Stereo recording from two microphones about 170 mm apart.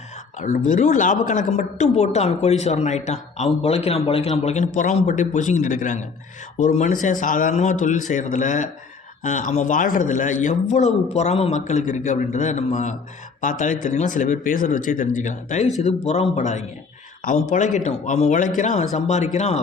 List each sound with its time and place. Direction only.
0.3 s speech: 45° left (ahead or behind)
17.2 s speech: 55° left (ahead or behind)
17.8 s speech: 45° left (ahead or behind)